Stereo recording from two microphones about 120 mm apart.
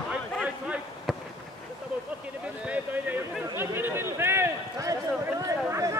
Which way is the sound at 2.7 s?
15° right (ahead or behind).